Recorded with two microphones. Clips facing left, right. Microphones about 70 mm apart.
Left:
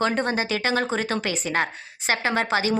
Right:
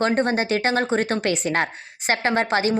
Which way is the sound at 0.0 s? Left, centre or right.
Right.